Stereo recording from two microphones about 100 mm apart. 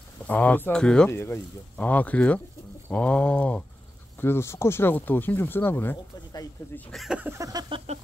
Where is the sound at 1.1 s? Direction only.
25° left (ahead or behind).